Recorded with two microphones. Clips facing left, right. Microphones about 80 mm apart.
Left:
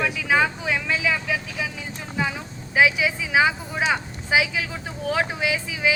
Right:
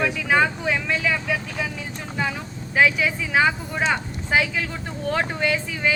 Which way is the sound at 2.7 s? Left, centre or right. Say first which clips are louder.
Even; centre.